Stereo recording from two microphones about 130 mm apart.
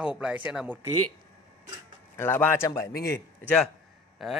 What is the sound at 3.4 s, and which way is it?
Speech, 5° left (ahead or behind).